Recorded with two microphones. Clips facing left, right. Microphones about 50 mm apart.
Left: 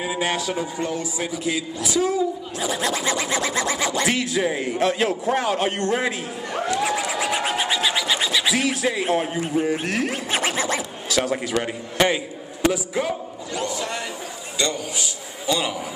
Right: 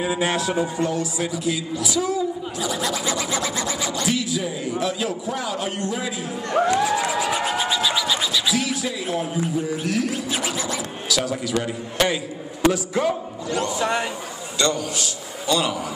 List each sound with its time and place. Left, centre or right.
0.0 s a man's voice: centre
0.4 s a man's voice: centre
0.7 s a woman's voice: left
2.6 s scratch: left
4.0 s a man's voice: left
6.6 s music: centre
7.2 s a sound: left
11.5 s a woman's voice: left
12.7 s a man's voice: centre
13.7 s a man's voice: right
14.6 s a man's voice: centre